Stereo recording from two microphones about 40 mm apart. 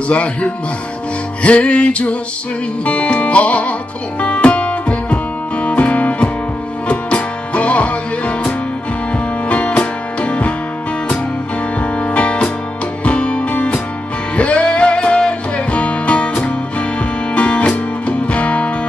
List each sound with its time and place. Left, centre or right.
0.1 s speech: left
1.4 s music: left
11.8 s music: left